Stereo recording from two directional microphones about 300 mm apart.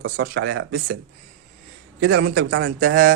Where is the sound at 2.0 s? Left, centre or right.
Right.